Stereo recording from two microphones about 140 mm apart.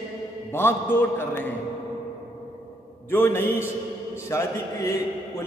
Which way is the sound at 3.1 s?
15° left (ahead or behind).